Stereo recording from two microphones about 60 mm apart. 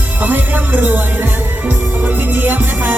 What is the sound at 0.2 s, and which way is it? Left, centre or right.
Speech, right.